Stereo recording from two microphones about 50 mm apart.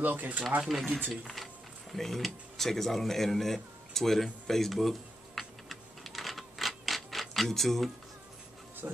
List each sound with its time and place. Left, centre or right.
0.0 s speech: right
0.6 s speech: centre
1.2 s a sound: centre
8.8 s speech: right